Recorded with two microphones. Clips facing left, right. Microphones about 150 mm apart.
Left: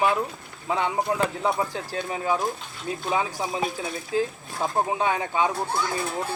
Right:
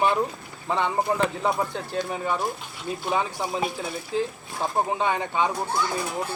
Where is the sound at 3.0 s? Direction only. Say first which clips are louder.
Even; centre (ahead or behind).